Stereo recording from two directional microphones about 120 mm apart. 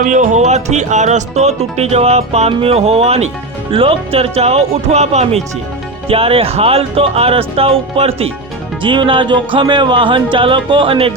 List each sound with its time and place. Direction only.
0.0 s speech: 90° right; by 5.4 s 70° right (ahead or behind)
6.1 s speech: 50° right (ahead or behind)
8.8 s speech: 45° right (ahead or behind)